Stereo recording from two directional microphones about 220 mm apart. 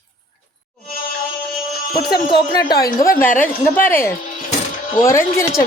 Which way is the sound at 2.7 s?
40° left (ahead or behind).